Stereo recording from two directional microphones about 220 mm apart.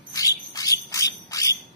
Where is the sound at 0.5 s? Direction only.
15° left (ahead or behind).